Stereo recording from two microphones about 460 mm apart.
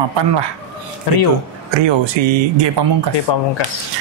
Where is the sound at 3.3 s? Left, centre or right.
Left.